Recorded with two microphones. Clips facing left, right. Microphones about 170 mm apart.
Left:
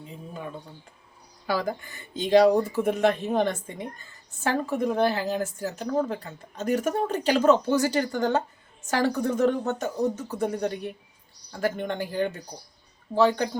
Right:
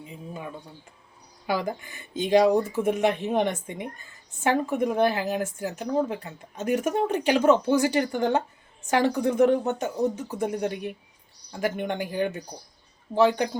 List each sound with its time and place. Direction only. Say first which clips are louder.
0.0 s a woman's voice: even; 10° right (ahead or behind)